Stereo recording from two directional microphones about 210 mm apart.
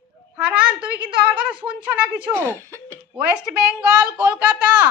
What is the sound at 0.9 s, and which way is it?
Speech, 50° right (ahead or behind).